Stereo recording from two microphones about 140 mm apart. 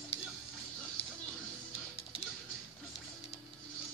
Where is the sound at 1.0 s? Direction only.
45° left (ahead or behind).